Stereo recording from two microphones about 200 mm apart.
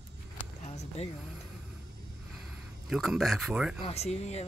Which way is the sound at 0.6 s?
35° left (ahead or behind).